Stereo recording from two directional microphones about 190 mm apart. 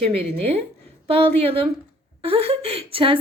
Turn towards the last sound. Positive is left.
turn(degrees=-30)  # may be behind; listen again after turning